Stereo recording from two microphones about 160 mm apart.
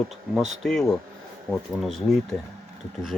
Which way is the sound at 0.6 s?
5° left (ahead or behind).